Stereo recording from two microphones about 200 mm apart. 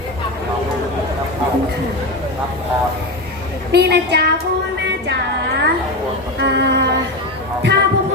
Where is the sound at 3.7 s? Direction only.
55° right (ahead or behind).